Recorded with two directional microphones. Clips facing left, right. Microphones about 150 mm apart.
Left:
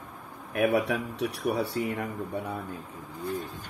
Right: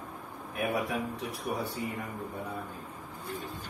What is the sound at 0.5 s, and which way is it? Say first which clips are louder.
Speech: left 6 dB; 90° left.